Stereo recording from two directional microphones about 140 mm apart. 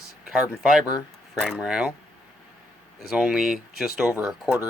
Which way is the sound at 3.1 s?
5° right (ahead or behind).